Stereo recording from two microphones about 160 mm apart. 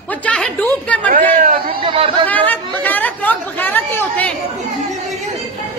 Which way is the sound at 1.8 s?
35° right (ahead or behind).